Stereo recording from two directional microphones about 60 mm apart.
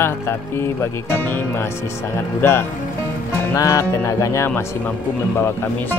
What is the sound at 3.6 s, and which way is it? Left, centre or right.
Music, left.